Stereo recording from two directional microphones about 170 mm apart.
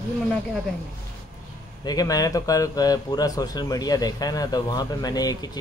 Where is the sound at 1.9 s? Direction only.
20° left (ahead or behind).